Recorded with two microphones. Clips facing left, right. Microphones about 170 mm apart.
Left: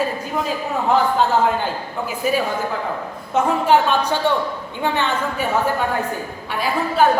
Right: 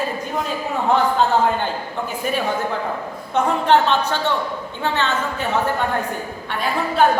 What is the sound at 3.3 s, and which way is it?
A man's voice, 10° left (ahead or behind).